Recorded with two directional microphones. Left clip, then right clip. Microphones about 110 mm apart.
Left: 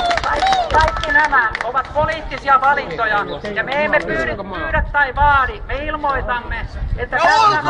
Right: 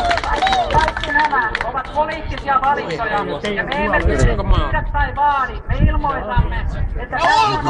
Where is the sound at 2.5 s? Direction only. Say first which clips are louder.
Left 3 dB; 20° left (ahead or behind).